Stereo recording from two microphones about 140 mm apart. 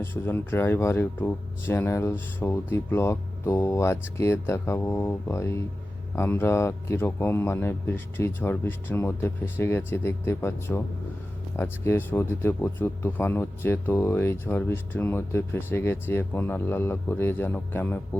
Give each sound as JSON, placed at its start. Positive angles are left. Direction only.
{"t": 0.0, "sound": "speech", "side_deg": 15}